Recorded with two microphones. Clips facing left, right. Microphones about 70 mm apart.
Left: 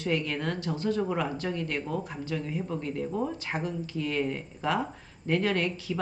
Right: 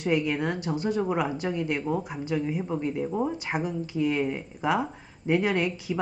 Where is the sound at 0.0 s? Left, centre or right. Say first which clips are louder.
Right 4 dB; centre.